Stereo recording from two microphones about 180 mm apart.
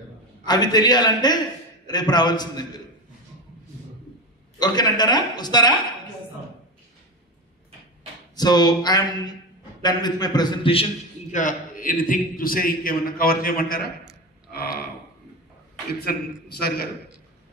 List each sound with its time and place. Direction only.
0.5 s a woman's voice: 20° left (ahead or behind)
4.6 s a woman's voice: 25° left (ahead or behind)
8.4 s a woman's voice: 20° left (ahead or behind)
11.3 s a man's voice: 50° left (ahead or behind)
14.5 s burping: 60° left (ahead or behind)
16.5 s a man's voice: 60° left (ahead or behind)